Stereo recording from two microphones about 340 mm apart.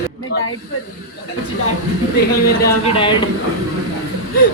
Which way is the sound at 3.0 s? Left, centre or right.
Centre.